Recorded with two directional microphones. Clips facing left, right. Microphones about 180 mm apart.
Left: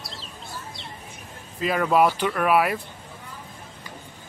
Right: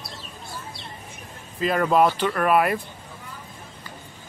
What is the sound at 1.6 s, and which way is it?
Speech, 5° left (ahead or behind).